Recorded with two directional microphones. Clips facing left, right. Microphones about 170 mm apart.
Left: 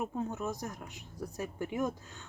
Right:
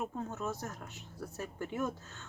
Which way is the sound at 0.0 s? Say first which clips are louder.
Left 3 dB; 15° left (ahead or behind).